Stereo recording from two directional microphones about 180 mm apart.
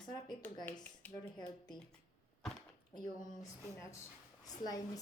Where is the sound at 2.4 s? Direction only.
5° left (ahead or behind).